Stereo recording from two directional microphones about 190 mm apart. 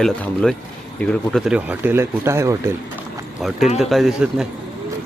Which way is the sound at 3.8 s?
Centre (ahead or behind).